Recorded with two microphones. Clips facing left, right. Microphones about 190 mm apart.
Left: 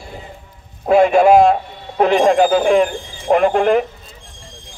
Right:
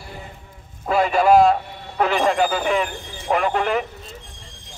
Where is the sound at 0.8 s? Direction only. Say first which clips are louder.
Left 6 dB; 50° left (ahead or behind).